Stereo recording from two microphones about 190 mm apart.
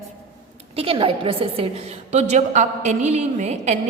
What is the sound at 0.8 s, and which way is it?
A woman's voice, 30° right (ahead or behind).